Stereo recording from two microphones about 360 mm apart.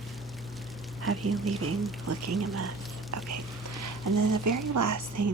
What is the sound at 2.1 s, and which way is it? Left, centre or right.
Speech, right.